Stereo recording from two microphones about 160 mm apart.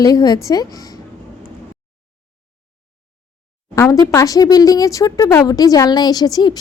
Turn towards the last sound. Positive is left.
turn(degrees=25)  # may be behind; listen again after turning